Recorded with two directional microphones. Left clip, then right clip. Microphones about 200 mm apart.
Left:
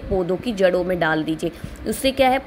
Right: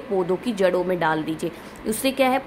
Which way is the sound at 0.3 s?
5° left (ahead or behind).